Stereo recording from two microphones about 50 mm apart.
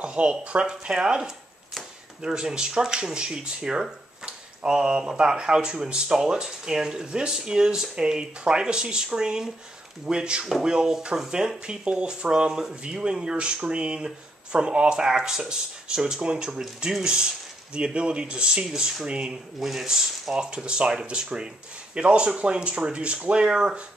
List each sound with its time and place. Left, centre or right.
0.0 s speech: right
19.0 s speech: right
19.6 s speech: centre
20.3 s speech: centre